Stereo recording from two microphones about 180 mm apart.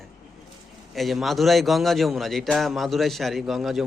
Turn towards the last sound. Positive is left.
turn(degrees=0)  # may be behind; listen again after turning